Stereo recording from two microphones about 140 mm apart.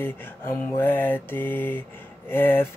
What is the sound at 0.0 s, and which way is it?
Mantra, 15° left (ahead or behind).